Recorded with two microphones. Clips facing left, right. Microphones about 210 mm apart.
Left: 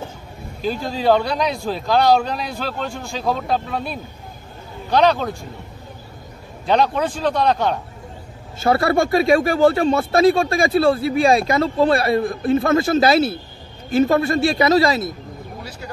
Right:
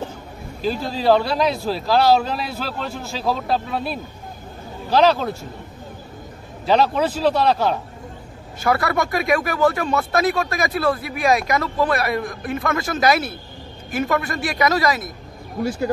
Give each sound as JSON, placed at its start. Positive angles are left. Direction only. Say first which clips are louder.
{"t": 0.6, "sound": "speech", "louder": "even", "side_deg": 0}
{"t": 6.6, "sound": "speech", "louder": "even", "side_deg": -5}
{"t": 8.5, "sound": "speech", "louder": "left 4 dB", "side_deg": 30}